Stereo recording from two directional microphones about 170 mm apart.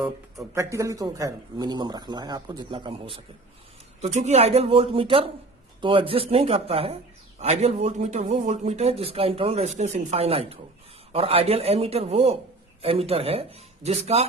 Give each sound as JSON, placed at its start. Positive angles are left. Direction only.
{"t": 0.3, "sound": "speech", "side_deg": -20}
{"t": 4.0, "sound": "speech", "side_deg": -40}